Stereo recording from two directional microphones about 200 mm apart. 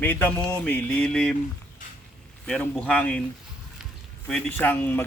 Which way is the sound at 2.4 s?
5° left (ahead or behind).